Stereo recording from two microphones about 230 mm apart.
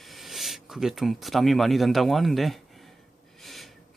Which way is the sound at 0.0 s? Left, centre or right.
Centre.